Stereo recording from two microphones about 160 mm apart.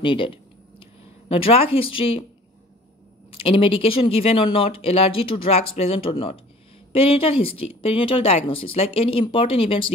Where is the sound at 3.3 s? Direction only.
35° left (ahead or behind).